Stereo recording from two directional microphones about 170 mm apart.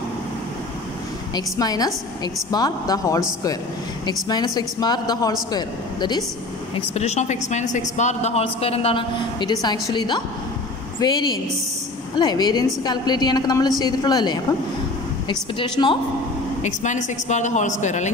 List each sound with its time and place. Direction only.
1.3 s a woman's voice: 25° left (ahead or behind)
6.9 s a woman's voice: 40° left (ahead or behind)
16.6 s a woman's voice: 45° left (ahead or behind)